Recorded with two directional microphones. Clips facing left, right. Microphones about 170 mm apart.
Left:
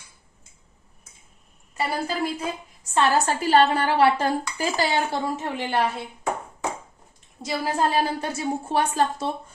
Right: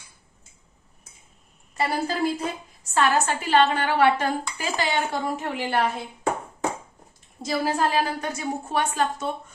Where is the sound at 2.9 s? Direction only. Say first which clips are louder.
Left 1 dB; 30° left (ahead or behind).